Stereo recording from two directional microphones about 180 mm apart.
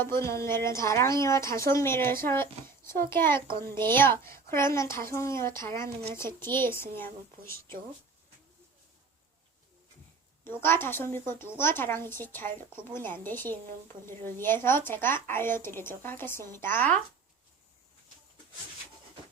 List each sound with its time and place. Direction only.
0.0 s a woman's voice: 15° left (ahead or behind)
3.5 s a child's voice: 25° right (ahead or behind)
3.9 s a woman's voice: 15° left (ahead or behind)
10.4 s a woman's voice: 10° left (ahead or behind)